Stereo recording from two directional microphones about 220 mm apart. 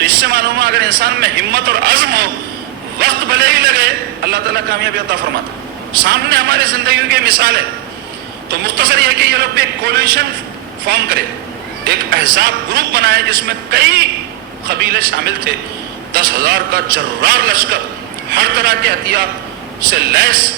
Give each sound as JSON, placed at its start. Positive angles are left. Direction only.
{"t": 0.0, "sound": "a man's voice", "side_deg": -45}
{"t": 6.1, "sound": "a man's voice", "side_deg": -45}
{"t": 8.6, "sound": "a man's voice", "side_deg": -45}